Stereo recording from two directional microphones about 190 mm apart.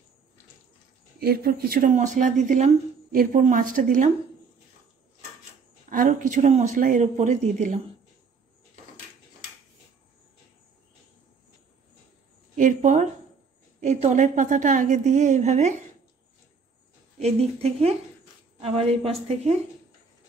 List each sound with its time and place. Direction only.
1.2 s speech: 55° right (ahead or behind)
5.9 s a woman's voice: 45° right (ahead or behind)
12.5 s a woman's voice: 40° right (ahead or behind)
17.2 s a woman's voice: 35° right (ahead or behind)